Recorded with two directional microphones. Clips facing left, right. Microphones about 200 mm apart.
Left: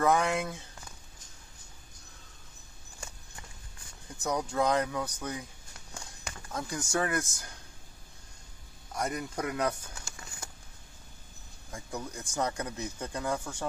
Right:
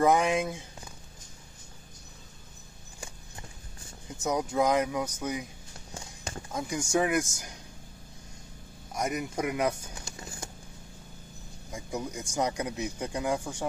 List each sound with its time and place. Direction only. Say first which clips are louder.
0.0 s speech: right 3 dB; 20° right (ahead or behind)
4.5 s speech: right 2 dB; 10° right (ahead or behind)
5.9 s clip-clop: right 5 dB; 25° right (ahead or behind)
6.5 s speech: right 4 dB; 15° right (ahead or behind)
8.9 s speech: right 3 dB; 15° right (ahead or behind)
10.1 s a sound: right 5 dB; 25° right (ahead or behind)
11.7 s speech: right 4 dB; 10° right (ahead or behind)